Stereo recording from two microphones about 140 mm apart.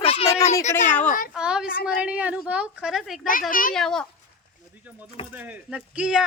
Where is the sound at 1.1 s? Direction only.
75° left (ahead or behind).